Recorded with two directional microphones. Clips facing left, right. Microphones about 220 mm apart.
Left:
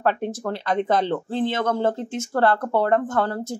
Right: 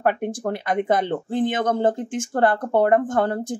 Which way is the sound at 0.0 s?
15° right (ahead or behind).